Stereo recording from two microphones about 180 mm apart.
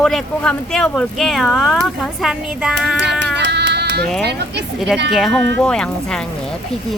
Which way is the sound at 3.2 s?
70° right (ahead or behind).